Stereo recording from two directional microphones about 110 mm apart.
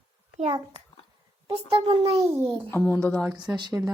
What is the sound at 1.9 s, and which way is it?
Speech, 60° right (ahead or behind).